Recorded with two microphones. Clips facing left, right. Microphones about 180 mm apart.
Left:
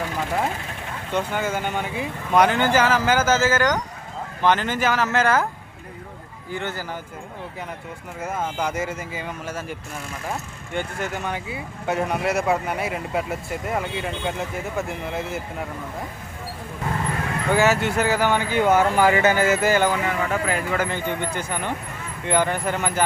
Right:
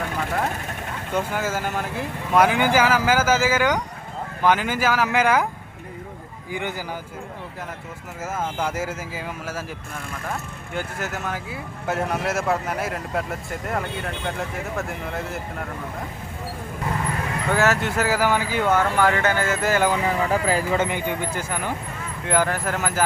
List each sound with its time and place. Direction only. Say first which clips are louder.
1.1 s speech: left 1 dB; 5° right (ahead or behind)
6.5 s speech: even; 15° right (ahead or behind)
8.5 s speech: even; 5° right (ahead or behind)
10.8 s speech: left 2 dB; 5° right (ahead or behind)
17.5 s speech: left 2 dB; centre (ahead or behind)
18.6 s speech: left 3 dB; 10° left (ahead or behind)
20.1 s speech: right 2 dB; 35° right (ahead or behind)
20.8 s speech: even; 10° right (ahead or behind)